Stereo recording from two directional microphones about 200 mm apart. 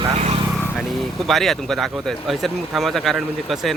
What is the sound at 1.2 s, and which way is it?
Speech, centre (ahead or behind).